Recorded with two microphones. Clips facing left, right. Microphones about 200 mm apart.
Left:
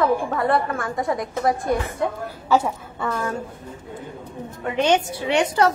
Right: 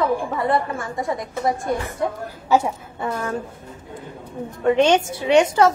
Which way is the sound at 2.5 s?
20° right (ahead or behind).